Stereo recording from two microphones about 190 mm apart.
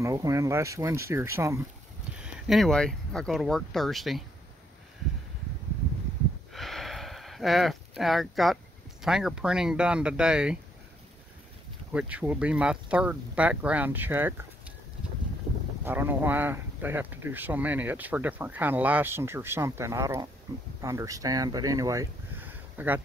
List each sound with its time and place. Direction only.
0.0 s speech: 15° right (ahead or behind)
2.3 s speech: centre (ahead or behind)
6.5 s a sound: centre (ahead or behind)
9.0 s speech: 5° right (ahead or behind)
11.9 s speech: 5° right (ahead or behind)
15.8 s speech: 10° right (ahead or behind)